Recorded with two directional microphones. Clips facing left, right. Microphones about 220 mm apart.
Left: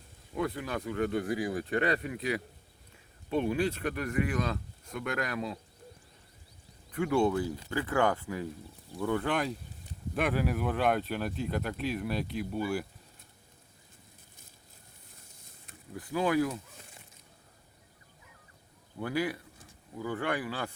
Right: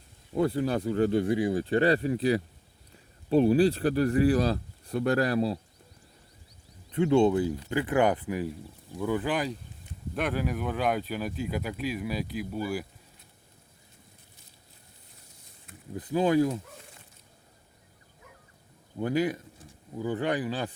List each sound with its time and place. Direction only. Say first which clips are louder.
0.3 s speech: right 7 dB; 30° right (ahead or behind)
6.9 s speech: right 5 dB; 25° right (ahead or behind)
9.0 s speech: right 2 dB; 5° right (ahead or behind)
16.0 s speech: right 4 dB; 20° right (ahead or behind)
18.9 s speech: right 5 dB; 20° right (ahead or behind)